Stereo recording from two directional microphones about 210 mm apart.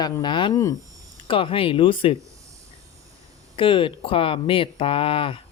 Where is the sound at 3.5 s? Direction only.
25° left (ahead or behind).